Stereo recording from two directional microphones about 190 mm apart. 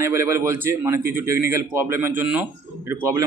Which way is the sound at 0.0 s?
15° right (ahead or behind).